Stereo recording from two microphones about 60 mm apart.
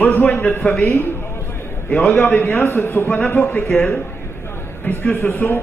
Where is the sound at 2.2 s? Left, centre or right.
Left.